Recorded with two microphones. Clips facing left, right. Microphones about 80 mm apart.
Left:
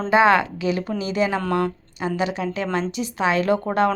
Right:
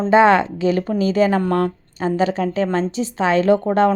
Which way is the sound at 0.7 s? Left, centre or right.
Right.